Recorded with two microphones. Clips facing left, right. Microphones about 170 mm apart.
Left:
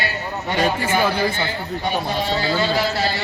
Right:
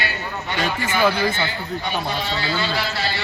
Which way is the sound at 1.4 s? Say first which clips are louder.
Left 2 dB; 40° left (ahead or behind).